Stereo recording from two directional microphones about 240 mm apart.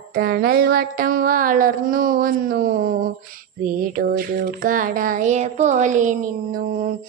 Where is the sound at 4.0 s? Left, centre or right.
Right.